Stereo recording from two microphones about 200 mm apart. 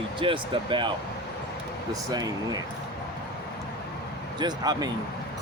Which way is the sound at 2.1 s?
20° right (ahead or behind).